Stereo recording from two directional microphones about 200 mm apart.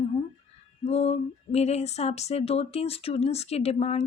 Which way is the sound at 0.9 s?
30° left (ahead or behind).